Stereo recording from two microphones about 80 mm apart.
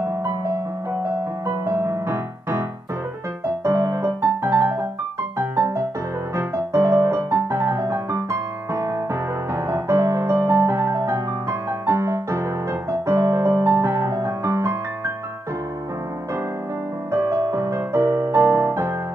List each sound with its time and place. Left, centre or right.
1.9 s music: right
3.6 s music: right
17.1 s music: right